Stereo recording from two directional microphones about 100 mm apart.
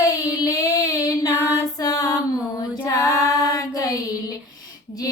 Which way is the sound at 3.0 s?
35° left (ahead or behind).